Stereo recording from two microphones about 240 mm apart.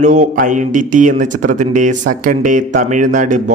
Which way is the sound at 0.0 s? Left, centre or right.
Right.